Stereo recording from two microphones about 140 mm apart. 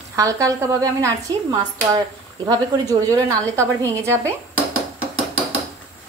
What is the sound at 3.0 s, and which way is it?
A woman's voice, 25° right (ahead or behind).